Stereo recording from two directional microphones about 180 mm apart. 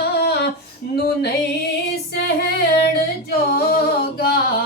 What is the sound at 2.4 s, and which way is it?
Singing, 60° left (ahead or behind).